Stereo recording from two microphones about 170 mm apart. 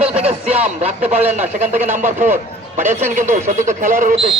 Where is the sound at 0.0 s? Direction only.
35° right (ahead or behind).